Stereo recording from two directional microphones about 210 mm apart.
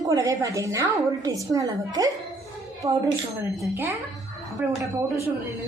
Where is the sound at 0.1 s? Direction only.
15° right (ahead or behind).